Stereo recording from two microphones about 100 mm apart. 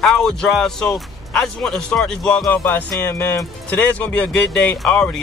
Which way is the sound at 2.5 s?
20° left (ahead or behind).